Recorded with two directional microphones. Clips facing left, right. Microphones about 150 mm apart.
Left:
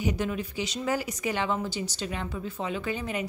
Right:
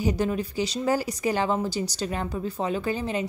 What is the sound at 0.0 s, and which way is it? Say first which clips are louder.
Speech: right 4 dB; 35° right (ahead or behind).